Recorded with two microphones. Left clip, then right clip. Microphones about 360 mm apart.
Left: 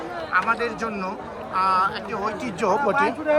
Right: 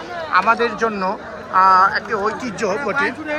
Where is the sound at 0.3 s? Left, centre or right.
Centre.